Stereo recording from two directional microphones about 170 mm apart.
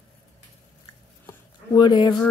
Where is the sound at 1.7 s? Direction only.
25° left (ahead or behind).